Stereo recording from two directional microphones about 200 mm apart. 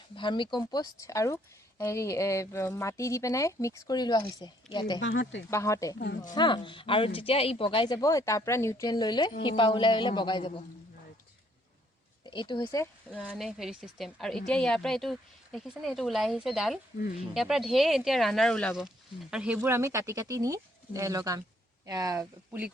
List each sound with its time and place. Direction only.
0.2 s speech: 25° left (ahead or behind)
4.9 s speech: 65° left (ahead or behind)
5.5 s speech: 15° left (ahead or behind)
12.2 s speech: 25° left (ahead or behind)
13.1 s speech: 5° right (ahead or behind)